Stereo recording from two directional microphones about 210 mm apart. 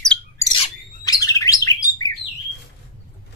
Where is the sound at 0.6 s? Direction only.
20° left (ahead or behind).